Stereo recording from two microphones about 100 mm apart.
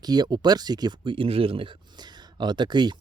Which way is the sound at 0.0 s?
45° right (ahead or behind).